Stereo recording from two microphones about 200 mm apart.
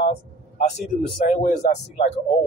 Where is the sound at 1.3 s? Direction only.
40° left (ahead or behind).